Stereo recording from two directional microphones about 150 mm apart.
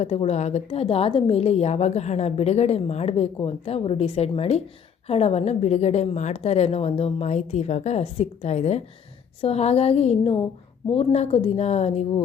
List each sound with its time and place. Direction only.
0.0 s a woman's voice: 45° left (ahead or behind)